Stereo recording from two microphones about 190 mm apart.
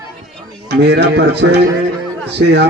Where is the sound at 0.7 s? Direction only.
65° right (ahead or behind).